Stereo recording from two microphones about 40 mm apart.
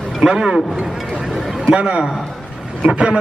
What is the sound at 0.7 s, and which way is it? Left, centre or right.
Speech, centre.